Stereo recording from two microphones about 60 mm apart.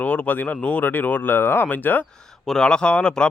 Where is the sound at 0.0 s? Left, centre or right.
Left.